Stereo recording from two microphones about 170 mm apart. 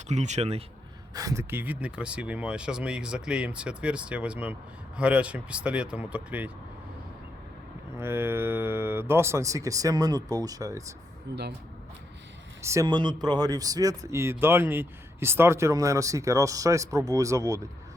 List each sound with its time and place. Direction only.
0.1 s speech: 45° right (ahead or behind)
1.1 s speech: 20° right (ahead or behind)
7.9 s speech: 15° right (ahead or behind)
11.3 s speech: 85° right
12.6 s speech: 20° right (ahead or behind)